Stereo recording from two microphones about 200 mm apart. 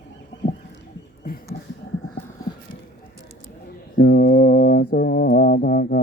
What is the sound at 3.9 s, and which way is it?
Mantra, 55° left (ahead or behind).